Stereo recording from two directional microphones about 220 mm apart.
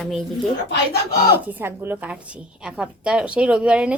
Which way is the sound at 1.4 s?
10° right (ahead or behind).